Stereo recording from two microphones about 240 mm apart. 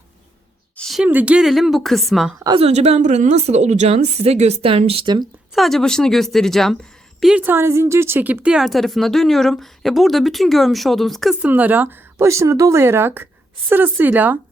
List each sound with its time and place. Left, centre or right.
0.8 s a woman's voice: centre
2.4 s a woman's voice: right
5.5 s a woman's voice: centre